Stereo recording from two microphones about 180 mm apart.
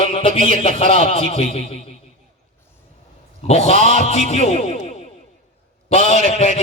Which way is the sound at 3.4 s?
35° left (ahead or behind).